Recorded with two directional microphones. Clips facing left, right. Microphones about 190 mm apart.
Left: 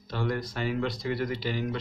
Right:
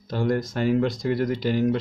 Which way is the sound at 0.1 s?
45° right (ahead or behind).